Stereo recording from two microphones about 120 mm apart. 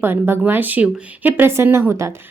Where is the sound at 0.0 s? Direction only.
20° right (ahead or behind).